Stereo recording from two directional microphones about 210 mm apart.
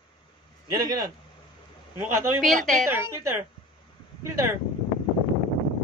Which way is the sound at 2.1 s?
10° right (ahead or behind).